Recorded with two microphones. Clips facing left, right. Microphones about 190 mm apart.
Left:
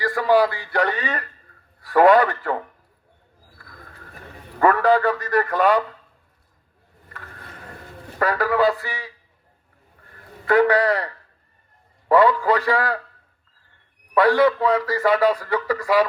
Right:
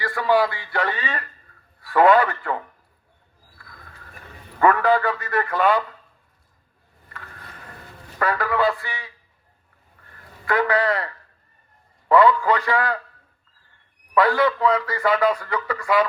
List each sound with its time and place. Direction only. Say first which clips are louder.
0.0 s a man's voice: left 2 dB; 40° left (ahead or behind)
3.6 s a sound: left 3 dB; 40° left (ahead or behind)
4.6 s a man's voice: left 1 dB; 35° left (ahead or behind)
8.2 s a man's voice: left 2 dB; 35° left (ahead or behind)
10.5 s a man's voice: left 4 dB; 35° left (ahead or behind)
14.1 s a man's voice: left 3 dB; 35° left (ahead or behind)